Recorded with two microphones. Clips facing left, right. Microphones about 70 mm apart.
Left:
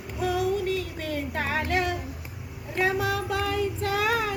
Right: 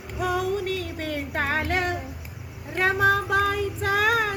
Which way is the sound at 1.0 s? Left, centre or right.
Right.